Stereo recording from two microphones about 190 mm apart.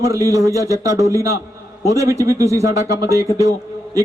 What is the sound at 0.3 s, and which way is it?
Speech, 15° right (ahead or behind).